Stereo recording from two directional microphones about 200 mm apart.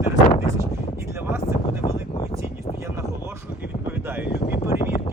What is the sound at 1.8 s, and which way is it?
Speech, 30° left (ahead or behind).